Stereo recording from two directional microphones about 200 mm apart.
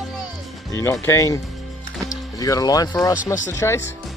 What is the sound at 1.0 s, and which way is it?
Speech, 15° left (ahead or behind).